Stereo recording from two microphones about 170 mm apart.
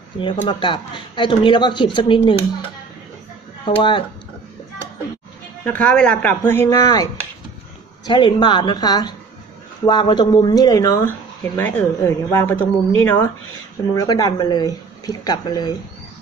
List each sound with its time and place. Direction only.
0.5 s speech: 30° left (ahead or behind)
3.6 s speech: 30° left (ahead or behind)
5.7 s speech: 5° left (ahead or behind); by 15.7 s 25° left (ahead or behind)